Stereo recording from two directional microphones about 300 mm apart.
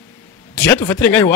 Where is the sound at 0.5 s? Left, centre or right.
Centre.